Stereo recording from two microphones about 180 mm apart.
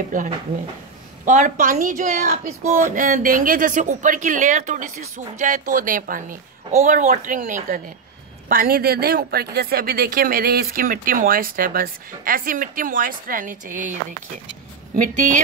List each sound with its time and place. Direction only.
0.1 s speech: 45° right (ahead or behind)